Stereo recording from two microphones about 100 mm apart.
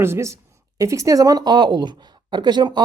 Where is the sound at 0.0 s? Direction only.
25° right (ahead or behind).